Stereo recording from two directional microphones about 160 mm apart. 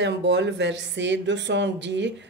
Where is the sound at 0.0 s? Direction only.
90° right.